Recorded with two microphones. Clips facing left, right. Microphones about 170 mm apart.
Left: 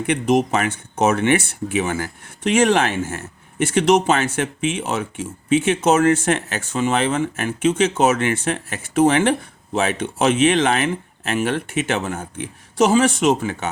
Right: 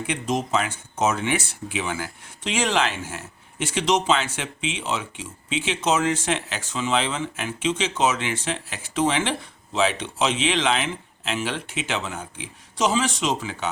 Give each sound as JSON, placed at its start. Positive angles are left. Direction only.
{"t": 0.0, "sound": "speech", "side_deg": 60}